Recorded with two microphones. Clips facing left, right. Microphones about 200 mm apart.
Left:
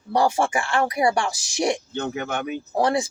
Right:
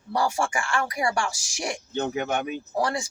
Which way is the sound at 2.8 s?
20° left (ahead or behind).